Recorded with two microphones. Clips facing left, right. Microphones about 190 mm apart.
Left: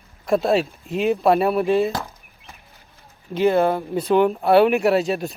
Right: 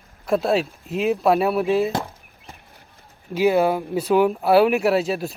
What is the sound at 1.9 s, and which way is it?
Chop, 30° right (ahead or behind).